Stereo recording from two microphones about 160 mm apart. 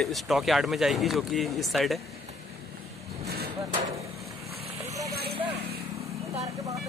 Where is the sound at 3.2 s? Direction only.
80° right.